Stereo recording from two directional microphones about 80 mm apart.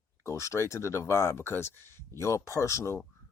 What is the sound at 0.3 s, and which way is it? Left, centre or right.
Speech, left.